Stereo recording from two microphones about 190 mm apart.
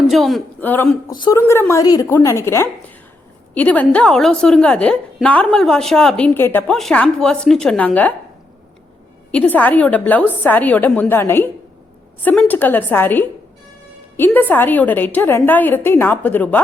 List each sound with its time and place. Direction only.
0.1 s a woman's voice: centre (ahead or behind)
1.1 s speech: 25° left (ahead or behind)
1.4 s a woman's voice: 15° left (ahead or behind)
9.3 s a woman's voice: 5° left (ahead or behind)